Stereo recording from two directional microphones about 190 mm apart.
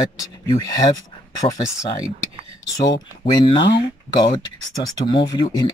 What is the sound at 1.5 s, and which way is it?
Speech, 20° left (ahead or behind).